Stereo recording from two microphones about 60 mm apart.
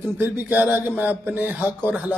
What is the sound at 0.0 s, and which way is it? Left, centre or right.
Speech, right.